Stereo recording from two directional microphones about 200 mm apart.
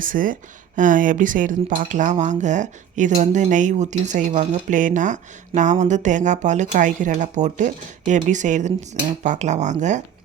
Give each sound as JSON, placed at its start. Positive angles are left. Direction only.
{"t": 0.0, "sound": "speech", "side_deg": -45}